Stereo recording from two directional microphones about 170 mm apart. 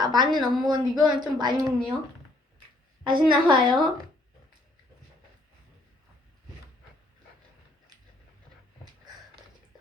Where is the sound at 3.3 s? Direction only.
25° right (ahead or behind).